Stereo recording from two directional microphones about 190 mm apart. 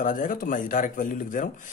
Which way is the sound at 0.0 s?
45° left (ahead or behind).